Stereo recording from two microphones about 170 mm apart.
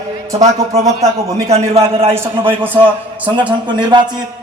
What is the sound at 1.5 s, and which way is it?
A man's voice, 35° right (ahead or behind).